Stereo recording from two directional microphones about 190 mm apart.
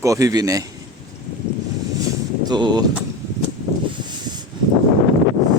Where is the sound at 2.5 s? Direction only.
25° right (ahead or behind).